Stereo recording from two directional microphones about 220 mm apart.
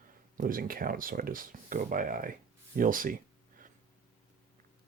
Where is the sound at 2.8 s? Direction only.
40° right (ahead or behind).